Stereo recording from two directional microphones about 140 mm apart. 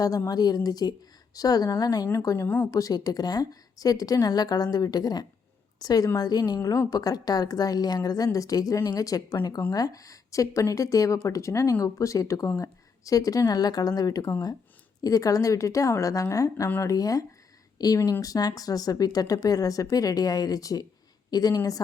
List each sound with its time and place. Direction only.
0.3 s speech: 30° left (ahead or behind)
16.6 s speech: 15° left (ahead or behind)
16.9 s speech: 25° left (ahead or behind)